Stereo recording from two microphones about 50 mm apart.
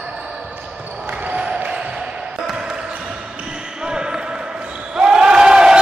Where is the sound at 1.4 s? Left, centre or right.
Right.